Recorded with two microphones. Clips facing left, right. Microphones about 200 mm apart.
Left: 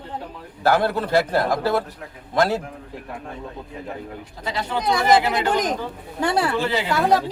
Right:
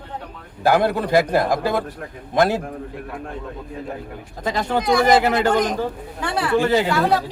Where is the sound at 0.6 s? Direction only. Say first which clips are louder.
Right 2 dB; 15° right (ahead or behind).